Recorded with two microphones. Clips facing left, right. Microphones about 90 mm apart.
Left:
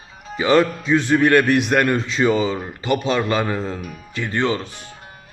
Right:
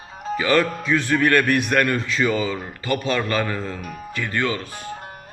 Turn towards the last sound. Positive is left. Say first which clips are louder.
# left 3 dB
turn(degrees=25)  # may be behind; listen again after turning